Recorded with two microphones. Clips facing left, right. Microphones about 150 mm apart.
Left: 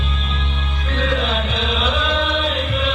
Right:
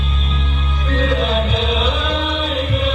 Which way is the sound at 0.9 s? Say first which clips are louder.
Right 3 dB; 40° right (ahead or behind).